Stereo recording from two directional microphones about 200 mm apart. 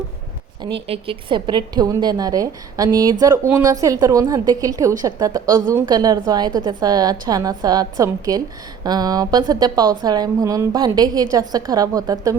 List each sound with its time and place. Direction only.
0.6 s a woman's voice: 25° right (ahead or behind)